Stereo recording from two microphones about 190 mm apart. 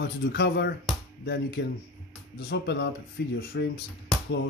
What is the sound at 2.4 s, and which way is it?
Speech, 55° left (ahead or behind).